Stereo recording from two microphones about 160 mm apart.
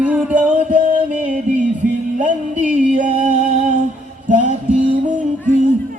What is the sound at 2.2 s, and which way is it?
Music, 50° right (ahead or behind).